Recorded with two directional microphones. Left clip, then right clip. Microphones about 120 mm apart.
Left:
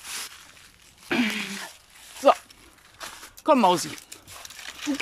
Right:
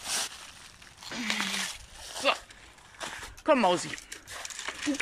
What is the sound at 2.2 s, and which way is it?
Speech, 80° left.